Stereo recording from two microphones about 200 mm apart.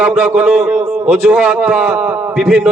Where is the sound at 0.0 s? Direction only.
10° right (ahead or behind).